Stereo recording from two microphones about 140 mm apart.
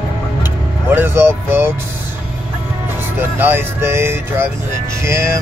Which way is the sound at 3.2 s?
15° right (ahead or behind).